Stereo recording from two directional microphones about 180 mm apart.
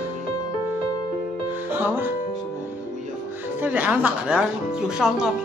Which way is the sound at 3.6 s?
10° right (ahead or behind).